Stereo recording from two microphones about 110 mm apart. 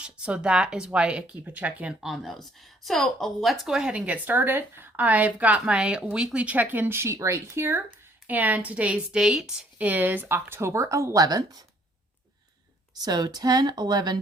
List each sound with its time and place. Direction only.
0.0 s speech: 10° right (ahead or behind); by 11.6 s 35° right (ahead or behind)
13.0 s speech: 40° right (ahead or behind)